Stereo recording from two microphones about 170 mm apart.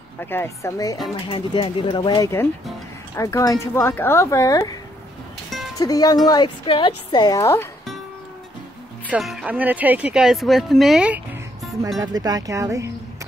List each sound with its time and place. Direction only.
0.2 s speech: 15° left (ahead or behind)
5.8 s speech: 20° left (ahead or behind)
9.1 s speech: 5° right (ahead or behind)
12.0 s speech: 20° right (ahead or behind)